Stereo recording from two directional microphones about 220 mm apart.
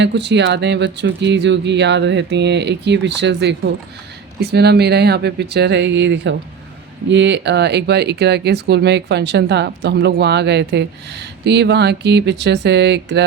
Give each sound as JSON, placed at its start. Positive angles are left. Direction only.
{"t": 0.0, "sound": "speech", "side_deg": -50}